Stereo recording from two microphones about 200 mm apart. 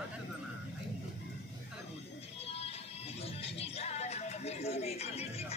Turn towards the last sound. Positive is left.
turn(degrees=30)  # may be behind; listen again after turning